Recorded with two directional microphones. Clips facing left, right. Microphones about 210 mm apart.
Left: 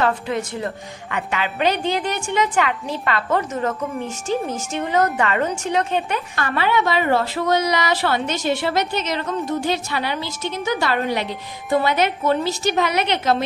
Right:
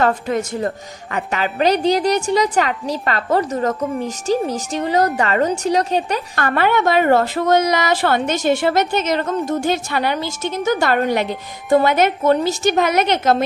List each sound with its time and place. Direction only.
0.0 s a woman's voice: 45° right (ahead or behind)
6.3 s a woman's voice: 50° right (ahead or behind)